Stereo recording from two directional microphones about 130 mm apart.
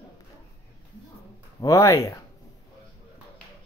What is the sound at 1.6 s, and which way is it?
Speech, 25° left (ahead or behind).